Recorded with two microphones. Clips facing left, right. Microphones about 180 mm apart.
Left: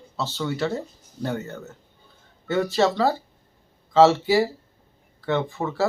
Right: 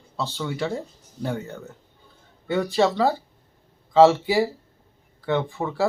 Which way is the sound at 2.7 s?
Centre (ahead or behind).